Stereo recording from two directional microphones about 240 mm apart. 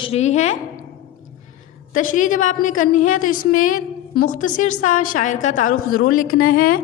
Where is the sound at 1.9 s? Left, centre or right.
Left.